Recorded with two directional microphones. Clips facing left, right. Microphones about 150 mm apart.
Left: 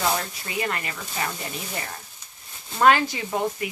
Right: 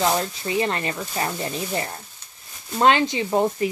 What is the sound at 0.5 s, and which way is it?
Speech, 30° right (ahead or behind).